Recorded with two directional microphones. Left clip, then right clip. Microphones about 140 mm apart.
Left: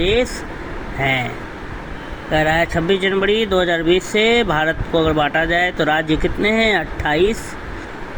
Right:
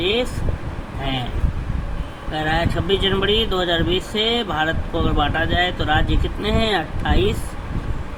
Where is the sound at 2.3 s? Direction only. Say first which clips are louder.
Left 6 dB; 35° left (ahead or behind).